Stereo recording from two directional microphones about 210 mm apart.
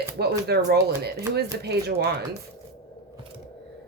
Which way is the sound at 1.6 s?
50° right (ahead or behind).